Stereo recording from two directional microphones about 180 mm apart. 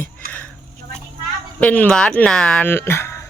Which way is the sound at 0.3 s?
10° left (ahead or behind).